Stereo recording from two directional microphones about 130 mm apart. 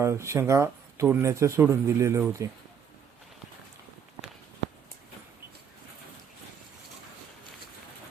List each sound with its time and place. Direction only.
0.0 s speech: 20° right (ahead or behind)